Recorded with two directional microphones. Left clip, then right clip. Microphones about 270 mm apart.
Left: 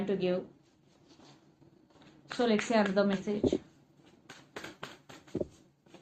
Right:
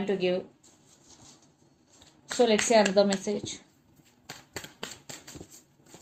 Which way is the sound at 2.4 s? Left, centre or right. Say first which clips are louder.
Right 7 dB; right.